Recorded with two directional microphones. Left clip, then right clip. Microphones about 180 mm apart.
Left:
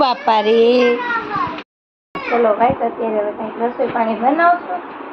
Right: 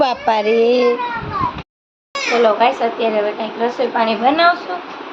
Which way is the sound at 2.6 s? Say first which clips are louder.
Right 1 dB; 35° right (ahead or behind).